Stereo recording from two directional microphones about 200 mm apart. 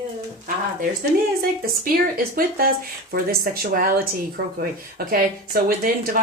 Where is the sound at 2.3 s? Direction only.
45° right (ahead or behind).